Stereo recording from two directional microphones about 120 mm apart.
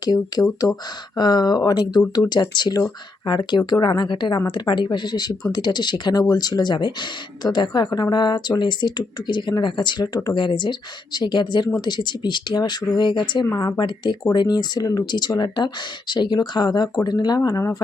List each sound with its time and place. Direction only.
0.0 s speech: 35° left (ahead or behind)